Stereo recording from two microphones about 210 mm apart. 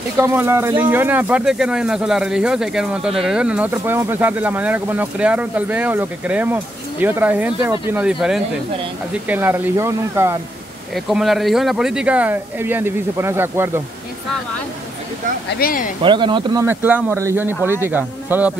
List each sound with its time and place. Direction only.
0.2 s speech: 10° right (ahead or behind)
11.1 s speech: centre (ahead or behind)
15.6 s speech: 40° left (ahead or behind)
16.0 s speech: 20° right (ahead or behind)
16.6 s speech: 10° right (ahead or behind)